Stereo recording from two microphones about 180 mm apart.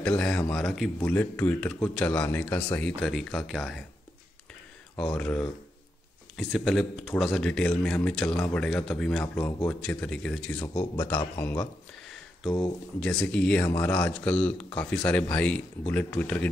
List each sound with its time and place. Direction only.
0.2 s speech: 5° left (ahead or behind)
4.9 s speech: 5° left (ahead or behind)
13.0 s speech: 5° left (ahead or behind)